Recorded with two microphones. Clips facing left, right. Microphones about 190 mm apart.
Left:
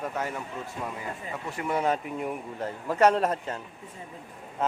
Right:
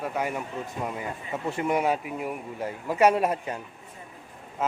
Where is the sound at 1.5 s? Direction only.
25° right (ahead or behind).